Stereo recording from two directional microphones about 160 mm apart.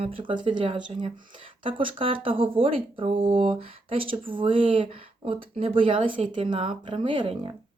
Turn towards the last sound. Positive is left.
turn(degrees=-35)  # may be behind; listen again after turning